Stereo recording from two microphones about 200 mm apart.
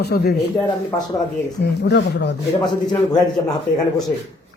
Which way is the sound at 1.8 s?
60° left (ahead or behind).